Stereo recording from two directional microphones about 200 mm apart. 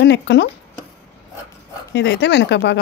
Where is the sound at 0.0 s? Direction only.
60° left (ahead or behind).